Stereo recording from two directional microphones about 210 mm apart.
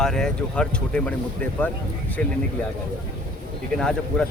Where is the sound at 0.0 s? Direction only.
5° left (ahead or behind).